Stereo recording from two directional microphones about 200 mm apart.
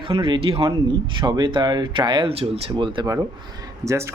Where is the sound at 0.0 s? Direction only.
25° right (ahead or behind).